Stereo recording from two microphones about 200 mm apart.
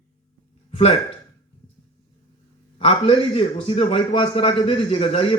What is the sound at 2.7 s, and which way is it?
A man's voice, 30° left (ahead or behind).